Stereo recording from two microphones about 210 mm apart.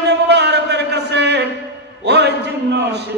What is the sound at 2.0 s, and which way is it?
Speech, 55° right (ahead or behind).